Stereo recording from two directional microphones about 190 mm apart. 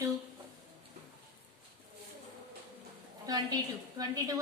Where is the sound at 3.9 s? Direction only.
20° right (ahead or behind).